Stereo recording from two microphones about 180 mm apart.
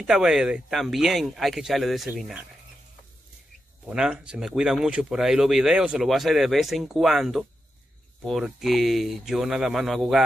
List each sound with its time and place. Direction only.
0.0 s speech: 5° right (ahead or behind)
3.8 s speech: 5° right (ahead or behind)